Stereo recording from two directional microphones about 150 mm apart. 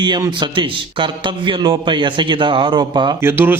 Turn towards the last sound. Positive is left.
turn(degrees=-15)  # may be behind; listen again after turning